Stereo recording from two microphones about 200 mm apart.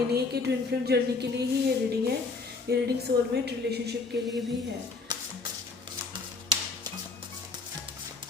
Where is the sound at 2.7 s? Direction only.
55° right (ahead or behind).